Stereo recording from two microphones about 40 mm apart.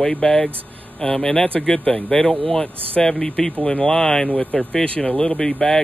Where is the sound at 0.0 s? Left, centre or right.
Left.